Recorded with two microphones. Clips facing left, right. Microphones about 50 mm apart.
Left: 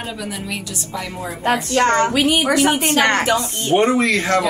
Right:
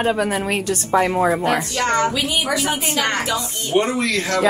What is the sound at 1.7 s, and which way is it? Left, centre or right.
A woman's voice, left.